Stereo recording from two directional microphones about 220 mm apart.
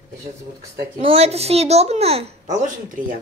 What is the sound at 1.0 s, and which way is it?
A woman's voice, 25° right (ahead or behind).